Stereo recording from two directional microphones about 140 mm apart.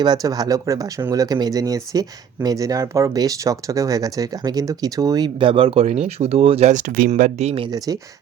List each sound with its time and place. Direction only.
0.0 s speech: 30° right (ahead or behind); by 7.7 s 45° right (ahead or behind)